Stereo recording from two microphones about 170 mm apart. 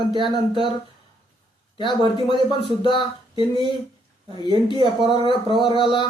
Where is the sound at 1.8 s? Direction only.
30° left (ahead or behind).